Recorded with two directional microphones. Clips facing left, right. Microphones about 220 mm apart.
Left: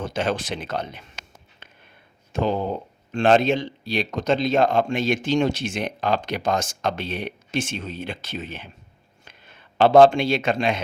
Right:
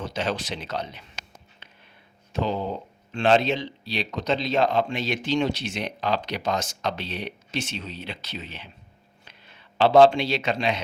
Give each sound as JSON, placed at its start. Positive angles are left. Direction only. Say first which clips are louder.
{"t": 0.0, "sound": "speech", "louder": "left 3 dB", "side_deg": 50}
{"t": 1.5, "sound": "a sound", "louder": "left 2 dB", "side_deg": 50}
{"t": 2.3, "sound": "a man's voice", "louder": "left 3 dB", "side_deg": 50}